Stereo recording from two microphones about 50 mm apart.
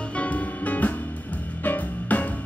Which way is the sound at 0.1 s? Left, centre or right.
Left.